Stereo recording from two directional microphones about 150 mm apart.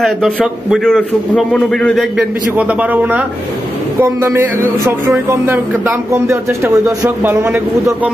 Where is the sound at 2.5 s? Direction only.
10° right (ahead or behind).